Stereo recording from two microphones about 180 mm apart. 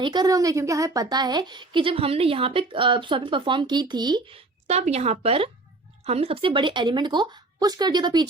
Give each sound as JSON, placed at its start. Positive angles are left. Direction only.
{"t": 0.0, "sound": "a woman's voice", "side_deg": -25}